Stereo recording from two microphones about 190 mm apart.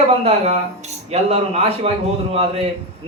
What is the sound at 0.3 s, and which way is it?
Speech, 35° right (ahead or behind).